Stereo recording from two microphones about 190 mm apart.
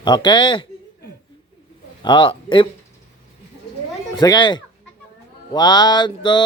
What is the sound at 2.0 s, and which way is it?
Speech, 25° left (ahead or behind).